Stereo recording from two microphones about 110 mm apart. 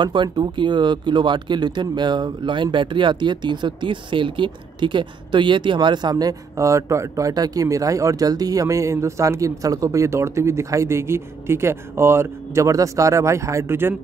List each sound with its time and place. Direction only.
0.0 s speech: 45° right (ahead or behind); by 13.9 s 20° right (ahead or behind)